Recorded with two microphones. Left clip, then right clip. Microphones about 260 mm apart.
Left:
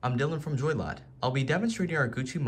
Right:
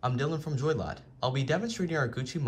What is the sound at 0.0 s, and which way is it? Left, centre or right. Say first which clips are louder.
A man's voice: left 1 dB; centre.